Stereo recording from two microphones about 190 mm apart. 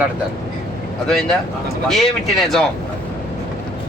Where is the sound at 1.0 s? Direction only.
5° left (ahead or behind).